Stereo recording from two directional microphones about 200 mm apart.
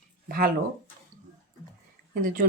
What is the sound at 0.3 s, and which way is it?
Speech, 45° right (ahead or behind).